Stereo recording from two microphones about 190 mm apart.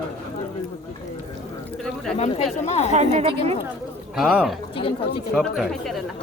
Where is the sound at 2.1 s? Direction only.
35° left (ahead or behind).